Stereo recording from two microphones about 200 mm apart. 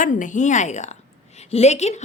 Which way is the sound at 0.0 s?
40° left (ahead or behind).